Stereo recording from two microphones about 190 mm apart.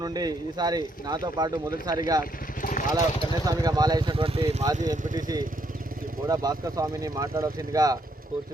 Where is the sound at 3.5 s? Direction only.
20° right (ahead or behind).